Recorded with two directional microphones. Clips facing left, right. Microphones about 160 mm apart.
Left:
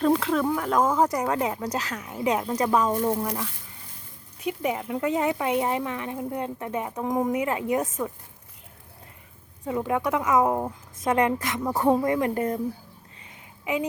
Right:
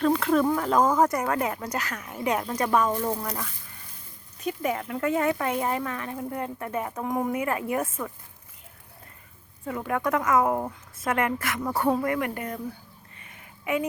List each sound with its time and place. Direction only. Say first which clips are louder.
0.2 s speech: right 2 dB; centre (ahead or behind)
4.4 s speech: left 1 dB; 15° left (ahead or behind)
9.6 s speech: left 2 dB; 20° left (ahead or behind)